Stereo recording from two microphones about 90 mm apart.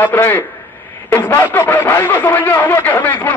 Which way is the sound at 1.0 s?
25° left (ahead or behind).